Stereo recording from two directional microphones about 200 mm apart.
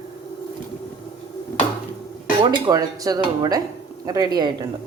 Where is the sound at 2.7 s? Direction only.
20° right (ahead or behind).